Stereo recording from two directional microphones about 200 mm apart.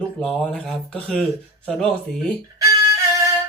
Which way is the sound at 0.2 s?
5° left (ahead or behind).